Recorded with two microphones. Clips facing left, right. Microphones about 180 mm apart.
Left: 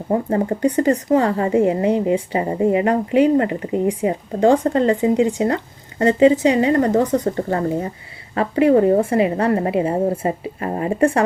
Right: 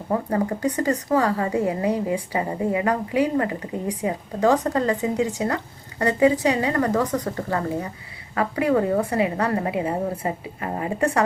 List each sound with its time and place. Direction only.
0.1 s speech: 30° left (ahead or behind)